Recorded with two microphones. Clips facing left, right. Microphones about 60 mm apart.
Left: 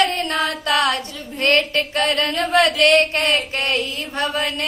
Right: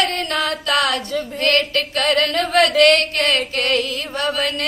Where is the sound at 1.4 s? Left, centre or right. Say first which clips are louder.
Left 2 dB; left.